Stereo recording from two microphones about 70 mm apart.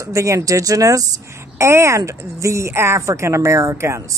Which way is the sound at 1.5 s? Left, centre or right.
Right.